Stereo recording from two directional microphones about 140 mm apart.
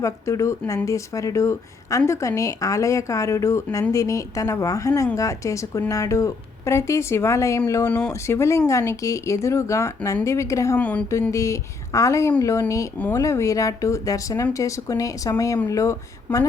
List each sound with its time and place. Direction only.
0.0 s speech: 20° left (ahead or behind)
10.8 s speech: 10° left (ahead or behind)
11.3 s speech: 20° left (ahead or behind)